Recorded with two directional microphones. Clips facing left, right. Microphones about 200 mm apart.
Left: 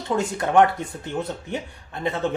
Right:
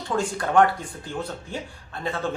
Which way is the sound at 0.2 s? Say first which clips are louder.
Left 1 dB; 20° left (ahead or behind).